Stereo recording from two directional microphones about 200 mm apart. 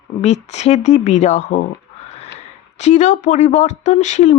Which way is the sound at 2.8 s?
35° left (ahead or behind).